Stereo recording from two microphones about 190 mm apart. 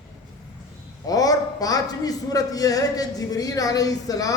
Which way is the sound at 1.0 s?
20° left (ahead or behind).